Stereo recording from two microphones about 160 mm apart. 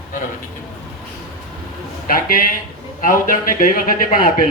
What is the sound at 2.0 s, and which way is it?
A man's voice, 60° left (ahead or behind).